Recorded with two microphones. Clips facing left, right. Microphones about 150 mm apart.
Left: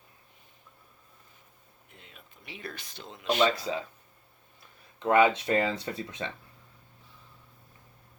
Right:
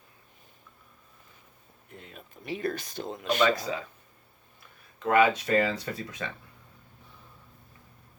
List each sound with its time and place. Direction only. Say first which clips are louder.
2.0 s speech: right 8 dB; 45° right (ahead or behind)
5.0 s speech: even; 25° left (ahead or behind)